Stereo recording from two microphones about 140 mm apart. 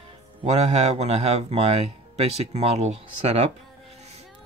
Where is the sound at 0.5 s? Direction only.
55° right (ahead or behind).